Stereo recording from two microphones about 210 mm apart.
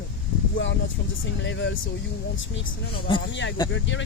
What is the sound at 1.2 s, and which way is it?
Speech, 60° left (ahead or behind).